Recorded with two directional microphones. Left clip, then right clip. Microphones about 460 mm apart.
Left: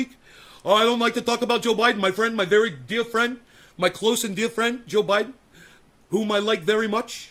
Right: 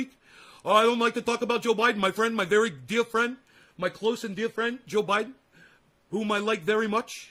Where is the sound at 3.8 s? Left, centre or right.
Centre.